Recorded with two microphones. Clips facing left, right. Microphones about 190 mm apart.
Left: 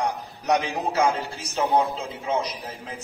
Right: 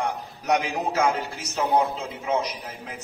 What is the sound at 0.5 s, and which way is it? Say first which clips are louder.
A man's voice: even; 35° left (ahead or behind).